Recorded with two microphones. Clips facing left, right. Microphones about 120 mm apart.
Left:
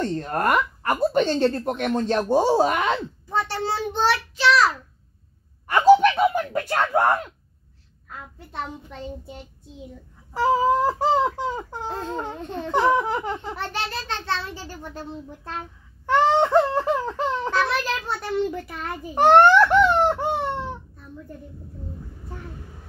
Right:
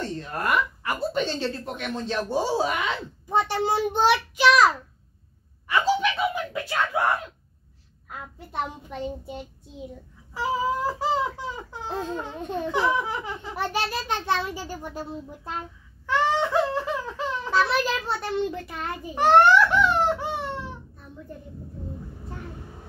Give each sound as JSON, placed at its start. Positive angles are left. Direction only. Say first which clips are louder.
{"t": 0.0, "sound": "speech", "louder": "left 6 dB", "side_deg": 50}
{"t": 3.3, "sound": "a child's voice", "louder": "right 2 dB", "side_deg": -15}
{"t": 5.7, "sound": "speech", "louder": "left 8 dB", "side_deg": 45}
{"t": 8.1, "sound": "a child's voice", "louder": "right 1 dB", "side_deg": -10}
{"t": 10.3, "sound": "speech", "louder": "left 6 dB", "side_deg": 50}
{"t": 13.6, "sound": "a child's voice", "louder": "right 2 dB", "side_deg": -10}
{"t": 16.1, "sound": "speech", "louder": "left 5 dB", "side_deg": 50}
{"t": 17.5, "sound": "a child's voice", "louder": "even", "side_deg": -5}
{"t": 19.1, "sound": "baby cry", "louder": "left 3 dB", "side_deg": 50}